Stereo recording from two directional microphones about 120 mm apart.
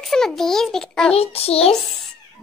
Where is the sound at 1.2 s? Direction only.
55° left (ahead or behind).